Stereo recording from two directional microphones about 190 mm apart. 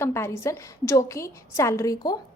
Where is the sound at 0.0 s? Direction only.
15° left (ahead or behind).